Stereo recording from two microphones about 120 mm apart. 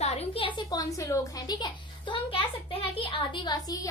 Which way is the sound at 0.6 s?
30° left (ahead or behind).